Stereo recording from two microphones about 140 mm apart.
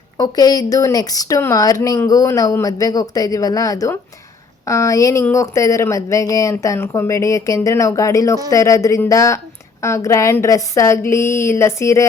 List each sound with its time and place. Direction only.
0.2 s speech: 25° left (ahead or behind)